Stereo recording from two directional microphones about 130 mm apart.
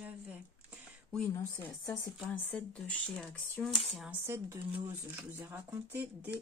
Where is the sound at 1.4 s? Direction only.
20° left (ahead or behind).